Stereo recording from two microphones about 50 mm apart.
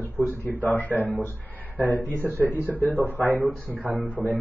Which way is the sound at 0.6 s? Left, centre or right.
Left.